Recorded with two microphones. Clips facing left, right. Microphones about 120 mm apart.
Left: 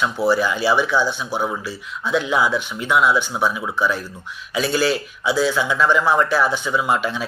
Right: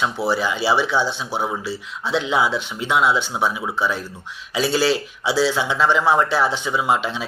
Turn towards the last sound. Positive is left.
turn(degrees=-25)  # may be behind; listen again after turning